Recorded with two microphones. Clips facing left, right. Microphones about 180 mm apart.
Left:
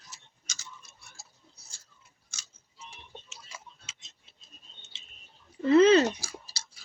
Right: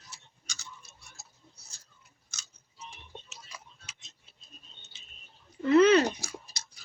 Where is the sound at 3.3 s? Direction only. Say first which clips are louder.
Left 1 dB; 25° left (ahead or behind).